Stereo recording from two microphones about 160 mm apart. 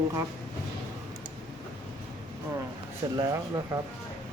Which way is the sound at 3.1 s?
20° right (ahead or behind).